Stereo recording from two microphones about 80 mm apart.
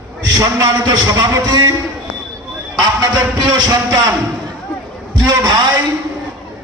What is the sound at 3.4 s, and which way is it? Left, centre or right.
Speech, right.